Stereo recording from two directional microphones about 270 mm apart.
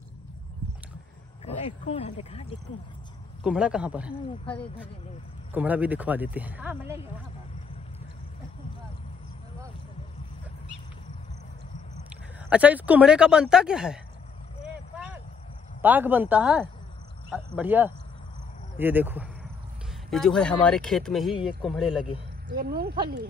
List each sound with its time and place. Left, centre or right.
1.4 s speech: left
3.4 s speech: centre
12.1 s speech: centre
14.6 s vehicle: centre
15.8 s speech: centre
22.5 s speech: right